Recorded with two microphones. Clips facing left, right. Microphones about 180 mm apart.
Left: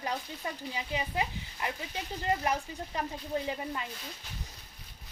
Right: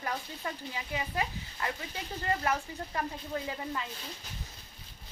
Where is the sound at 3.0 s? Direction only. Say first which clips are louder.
Left 2 dB; 20° left (ahead or behind).